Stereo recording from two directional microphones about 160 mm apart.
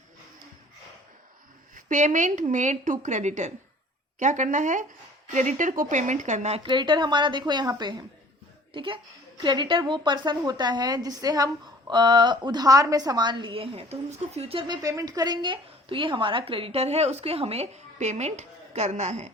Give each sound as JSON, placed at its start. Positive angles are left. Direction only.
{"t": 1.7, "sound": "a woman's voice", "side_deg": -50}
{"t": 6.7, "sound": "a woman's voice", "side_deg": -30}
{"t": 14.8, "sound": "a woman's voice", "side_deg": -20}